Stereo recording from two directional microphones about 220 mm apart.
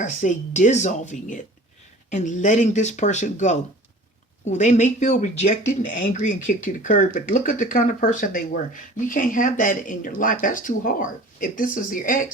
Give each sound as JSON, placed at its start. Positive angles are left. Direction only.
{"t": 0.0, "sound": "speech", "side_deg": 35}